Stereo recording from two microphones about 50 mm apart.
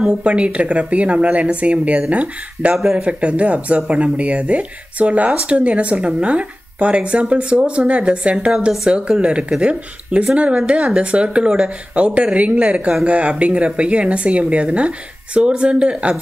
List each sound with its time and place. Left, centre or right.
0.2 s speech: right
2.7 s speech: centre
3.0 s speech: right